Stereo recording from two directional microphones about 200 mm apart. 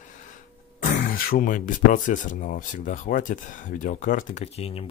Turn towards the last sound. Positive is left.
turn(degrees=30)  # may be behind; listen again after turning